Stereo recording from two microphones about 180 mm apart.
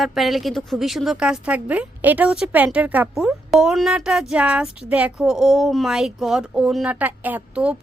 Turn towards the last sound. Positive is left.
turn(degrees=-10)  # may be behind; listen again after turning